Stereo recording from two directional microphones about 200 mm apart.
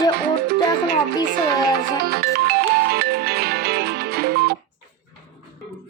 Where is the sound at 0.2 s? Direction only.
50° right (ahead or behind).